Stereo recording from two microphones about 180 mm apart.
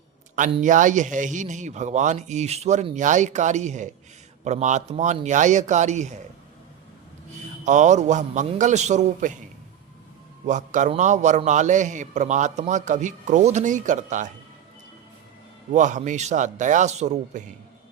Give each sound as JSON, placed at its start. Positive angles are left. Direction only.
{"t": 0.3, "sound": "speech", "side_deg": -45}
{"t": 7.6, "sound": "speech", "side_deg": -40}
{"t": 10.4, "sound": "a man's voice", "side_deg": -45}
{"t": 15.7, "sound": "a man's voice", "side_deg": -45}